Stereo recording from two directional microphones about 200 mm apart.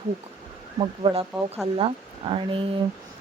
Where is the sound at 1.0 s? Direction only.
25° right (ahead or behind).